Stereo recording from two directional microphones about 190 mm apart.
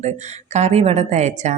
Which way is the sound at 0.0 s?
35° right (ahead or behind).